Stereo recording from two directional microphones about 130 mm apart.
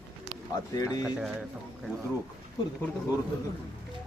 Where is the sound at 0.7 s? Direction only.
25° left (ahead or behind).